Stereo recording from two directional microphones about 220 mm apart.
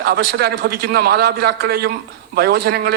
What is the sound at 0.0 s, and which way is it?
A man's voice, 45° right (ahead or behind).